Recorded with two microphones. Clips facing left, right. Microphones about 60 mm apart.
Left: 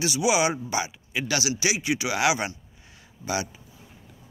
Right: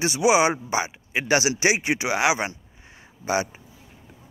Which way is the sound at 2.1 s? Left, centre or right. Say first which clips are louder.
Right 2 dB; right.